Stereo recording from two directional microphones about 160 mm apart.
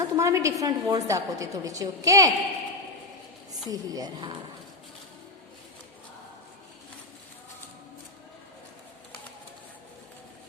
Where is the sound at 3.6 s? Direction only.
25° right (ahead or behind).